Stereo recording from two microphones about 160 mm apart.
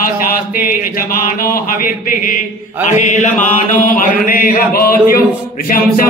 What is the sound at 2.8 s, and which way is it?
Mantra, 50° left (ahead or behind).